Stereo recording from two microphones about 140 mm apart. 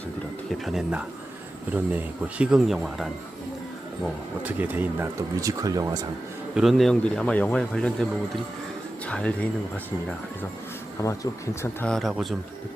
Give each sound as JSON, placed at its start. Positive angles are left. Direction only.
{"t": 0.6, "sound": "a man's voice", "side_deg": 0}
{"t": 4.4, "sound": "speech", "side_deg": -15}
{"t": 6.5, "sound": "a man's voice", "side_deg": 0}
{"t": 9.0, "sound": "speech", "side_deg": 10}
{"t": 11.0, "sound": "speech", "side_deg": 20}
{"t": 11.9, "sound": "a man's voice", "side_deg": 0}